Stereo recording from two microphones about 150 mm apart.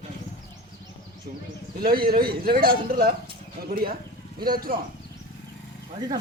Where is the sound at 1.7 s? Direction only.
85° right.